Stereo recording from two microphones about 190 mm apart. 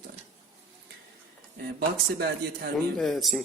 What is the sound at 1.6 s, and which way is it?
Speech, 60° right (ahead or behind).